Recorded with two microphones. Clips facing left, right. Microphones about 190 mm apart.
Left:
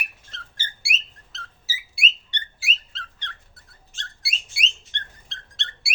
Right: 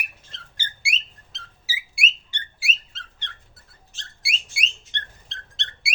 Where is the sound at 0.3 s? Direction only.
15° right (ahead or behind).